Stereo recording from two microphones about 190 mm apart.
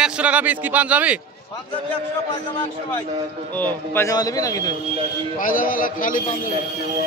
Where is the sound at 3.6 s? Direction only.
10° left (ahead or behind).